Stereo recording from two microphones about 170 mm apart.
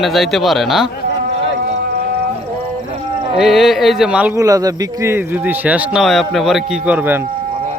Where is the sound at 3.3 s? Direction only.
Centre (ahead or behind).